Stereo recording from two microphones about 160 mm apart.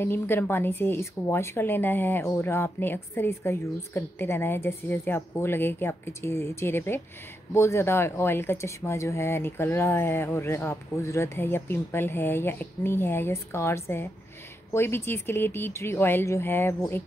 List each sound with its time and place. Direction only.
0.0 s a woman's voice: 15° left (ahead or behind)